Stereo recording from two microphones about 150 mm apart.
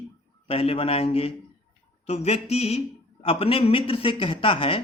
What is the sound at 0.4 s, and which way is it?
Speech, 40° left (ahead or behind).